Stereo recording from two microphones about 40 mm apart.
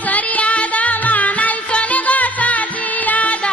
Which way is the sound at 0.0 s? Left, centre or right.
Left.